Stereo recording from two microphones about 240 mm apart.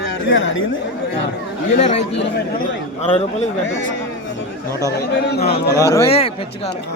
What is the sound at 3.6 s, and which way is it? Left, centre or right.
Speech, left.